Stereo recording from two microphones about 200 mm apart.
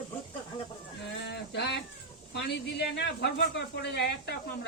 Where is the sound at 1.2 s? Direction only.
60° left (ahead or behind).